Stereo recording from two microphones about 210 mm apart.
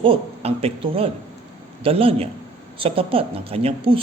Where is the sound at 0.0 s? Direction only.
25° right (ahead or behind).